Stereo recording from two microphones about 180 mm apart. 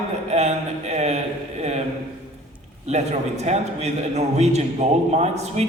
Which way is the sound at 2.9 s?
35° right (ahead or behind).